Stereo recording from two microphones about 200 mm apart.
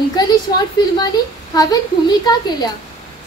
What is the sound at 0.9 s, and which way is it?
A woman's voice, 20° left (ahead or behind).